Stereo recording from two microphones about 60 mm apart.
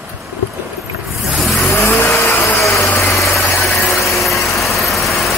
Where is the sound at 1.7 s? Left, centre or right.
Left.